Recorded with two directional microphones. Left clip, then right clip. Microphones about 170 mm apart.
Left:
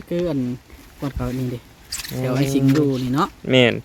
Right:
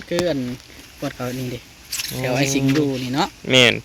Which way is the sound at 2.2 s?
80° left.